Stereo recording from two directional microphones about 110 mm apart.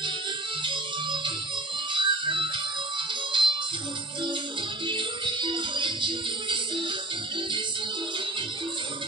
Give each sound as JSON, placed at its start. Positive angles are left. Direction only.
{"t": 0.7, "sound": "music", "side_deg": -45}
{"t": 4.8, "sound": "music", "side_deg": -45}